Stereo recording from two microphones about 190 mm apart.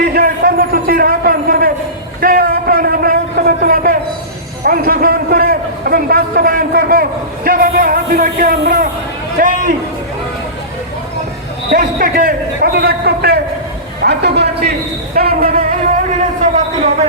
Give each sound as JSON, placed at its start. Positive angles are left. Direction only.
{"t": 0.0, "sound": "a sound", "side_deg": -50}
{"t": 4.6, "sound": "a man's voice", "side_deg": -50}
{"t": 11.7, "sound": "a man's voice", "side_deg": -50}